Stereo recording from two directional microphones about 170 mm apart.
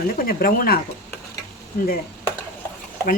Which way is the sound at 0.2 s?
60° left (ahead or behind).